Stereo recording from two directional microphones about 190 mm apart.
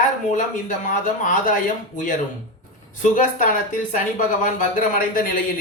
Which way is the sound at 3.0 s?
45° left (ahead or behind).